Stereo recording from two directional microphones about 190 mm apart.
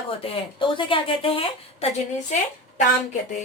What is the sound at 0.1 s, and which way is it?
A woman's voice, 30° left (ahead or behind).